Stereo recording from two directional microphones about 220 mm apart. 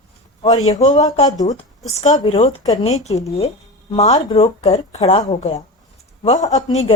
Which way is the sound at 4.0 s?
30° left (ahead or behind).